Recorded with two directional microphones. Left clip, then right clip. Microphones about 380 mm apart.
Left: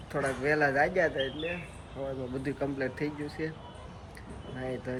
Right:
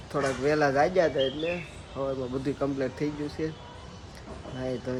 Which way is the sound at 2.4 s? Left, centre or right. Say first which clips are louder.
Right 2 dB; centre.